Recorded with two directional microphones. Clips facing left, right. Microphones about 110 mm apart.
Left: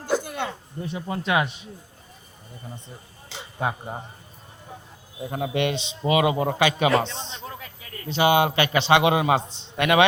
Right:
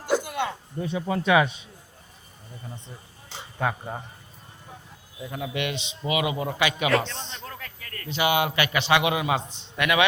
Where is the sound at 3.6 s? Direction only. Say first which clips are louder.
Even; 20° left (ahead or behind).